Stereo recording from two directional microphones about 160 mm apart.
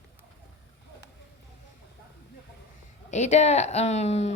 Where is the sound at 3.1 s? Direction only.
45° left (ahead or behind).